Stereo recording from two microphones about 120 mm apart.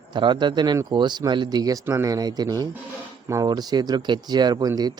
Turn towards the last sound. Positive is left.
turn(degrees=-35)  # may be behind; listen again after turning